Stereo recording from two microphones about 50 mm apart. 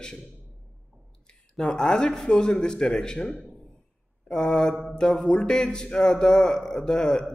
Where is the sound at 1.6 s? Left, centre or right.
Centre.